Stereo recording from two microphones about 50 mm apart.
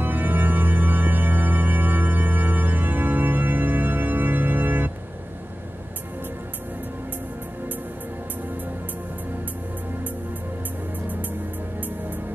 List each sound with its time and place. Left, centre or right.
0.0 s music: right